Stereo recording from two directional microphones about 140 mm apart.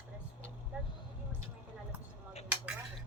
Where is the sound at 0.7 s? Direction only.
10° right (ahead or behind).